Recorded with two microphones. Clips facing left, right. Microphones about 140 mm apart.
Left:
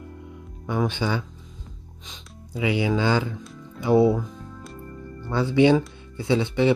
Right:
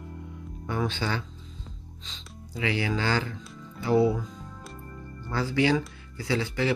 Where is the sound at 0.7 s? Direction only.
15° left (ahead or behind).